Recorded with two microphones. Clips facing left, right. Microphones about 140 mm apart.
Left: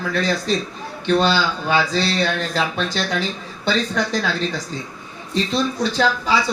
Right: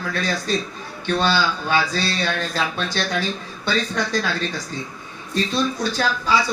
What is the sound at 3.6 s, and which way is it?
Speech, 20° left (ahead or behind).